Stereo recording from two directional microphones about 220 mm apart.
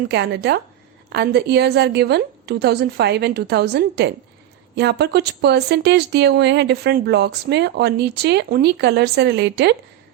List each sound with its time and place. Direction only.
0.1 s speech: 50° right (ahead or behind)